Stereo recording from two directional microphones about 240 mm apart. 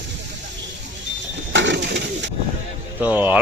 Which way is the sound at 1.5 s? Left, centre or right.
Right.